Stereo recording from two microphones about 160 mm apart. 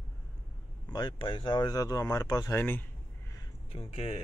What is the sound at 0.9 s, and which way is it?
Speech, 30° left (ahead or behind).